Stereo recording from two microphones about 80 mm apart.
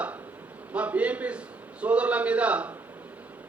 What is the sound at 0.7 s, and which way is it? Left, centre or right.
A man's voice, centre.